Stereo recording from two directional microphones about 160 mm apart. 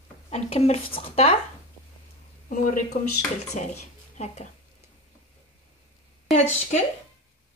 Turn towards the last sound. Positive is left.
turn(degrees=45)  # may be behind; listen again after turning